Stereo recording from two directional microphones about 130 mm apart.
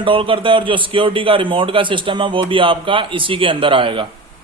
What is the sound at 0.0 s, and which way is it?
Speech, 40° right (ahead or behind).